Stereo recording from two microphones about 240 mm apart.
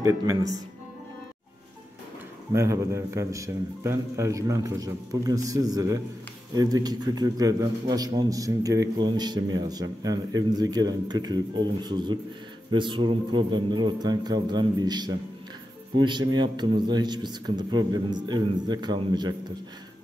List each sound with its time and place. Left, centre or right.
0.0 s a man's voice: centre
2.5 s a man's voice: centre